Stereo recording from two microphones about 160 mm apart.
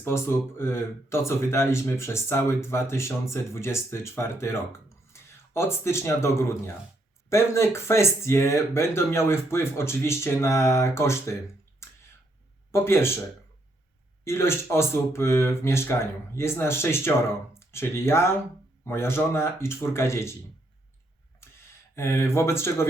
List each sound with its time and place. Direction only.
0.0 s speech: 15° left (ahead or behind)
11.8 s a sound: 15° left (ahead or behind)
12.7 s speech: 15° left (ahead or behind)
14.3 s speech: 15° left (ahead or behind)
21.4 s a sound: 15° left (ahead or behind)
21.9 s speech: 15° left (ahead or behind)